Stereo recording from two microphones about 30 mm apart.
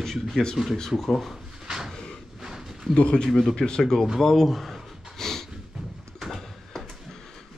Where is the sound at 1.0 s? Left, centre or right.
Centre.